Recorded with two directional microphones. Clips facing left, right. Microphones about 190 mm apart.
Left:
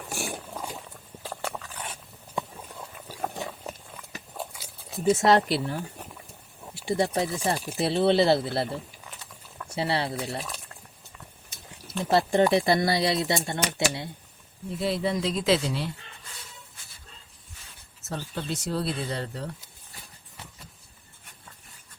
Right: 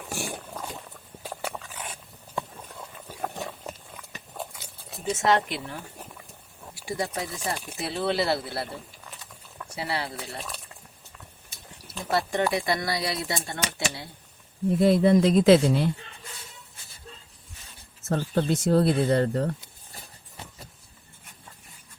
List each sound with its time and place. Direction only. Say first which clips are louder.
0.0 s roaring cats: even; centre (ahead or behind)
0.6 s a sound: left 1 dB; 5° left (ahead or behind)
1.2 s a sound: even; 5° right (ahead or behind)
5.1 s speech: left 2 dB; 35° left (ahead or behind)
9.7 s speech: left 4 dB; 25° left (ahead or behind)
10.2 s speech: left 4 dB; centre (ahead or behind)
12.0 s speech: left 4 dB; 30° left (ahead or behind)
14.7 s speech: right 8 dB; 50° right (ahead or behind)
18.1 s speech: right 8 dB; 50° right (ahead or behind)